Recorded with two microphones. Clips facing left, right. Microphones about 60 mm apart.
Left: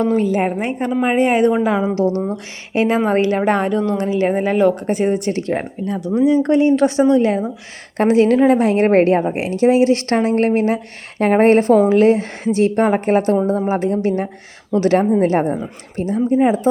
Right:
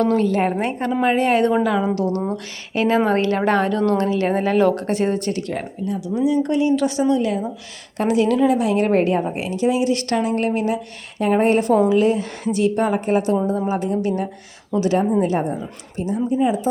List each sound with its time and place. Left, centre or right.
0.0 s a woman's voice: centre
1.6 s a woman's voice: left
5.3 s speech: left
5.9 s speech: left
9.2 s speech: left
9.5 s speech: left
14.7 s speech: left